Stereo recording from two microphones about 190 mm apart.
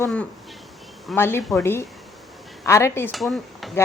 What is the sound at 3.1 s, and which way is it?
Stir, centre (ahead or behind).